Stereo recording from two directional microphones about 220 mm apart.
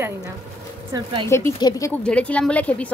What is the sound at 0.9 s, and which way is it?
Speech, 20° right (ahead or behind).